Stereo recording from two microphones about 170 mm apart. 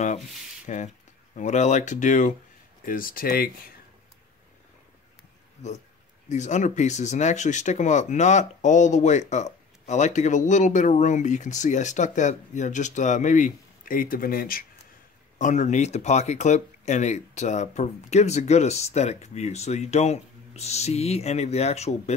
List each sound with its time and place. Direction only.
0.7 s speech: 45° left (ahead or behind)
6.2 s speech: 45° left (ahead or behind); by 14.7 s 60° left (ahead or behind)
15.3 s speech: 45° left (ahead or behind)